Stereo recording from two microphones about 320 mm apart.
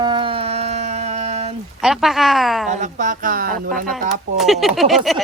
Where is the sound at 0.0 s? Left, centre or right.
Centre.